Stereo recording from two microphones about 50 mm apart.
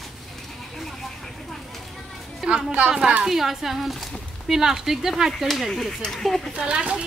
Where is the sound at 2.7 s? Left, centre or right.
Right.